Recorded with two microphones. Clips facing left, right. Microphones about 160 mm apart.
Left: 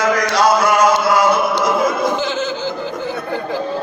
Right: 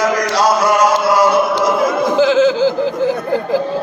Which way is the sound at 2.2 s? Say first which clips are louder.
Right 10 dB; 90° right.